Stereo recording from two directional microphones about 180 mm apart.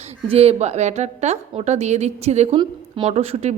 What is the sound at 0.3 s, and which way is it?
A woman's voice, 35° right (ahead or behind).